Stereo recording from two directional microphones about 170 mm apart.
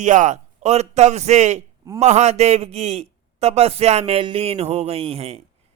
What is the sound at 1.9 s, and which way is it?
A man's voice, 40° right (ahead or behind).